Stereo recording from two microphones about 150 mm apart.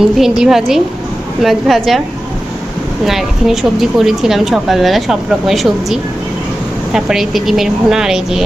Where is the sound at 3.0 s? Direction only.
Centre (ahead or behind).